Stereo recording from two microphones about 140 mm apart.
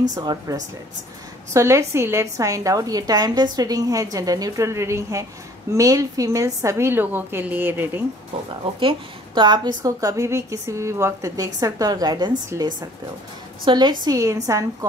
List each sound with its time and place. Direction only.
0.1 s a woman's voice: 30° right (ahead or behind)
8.7 s a woman's voice: 35° right (ahead or behind)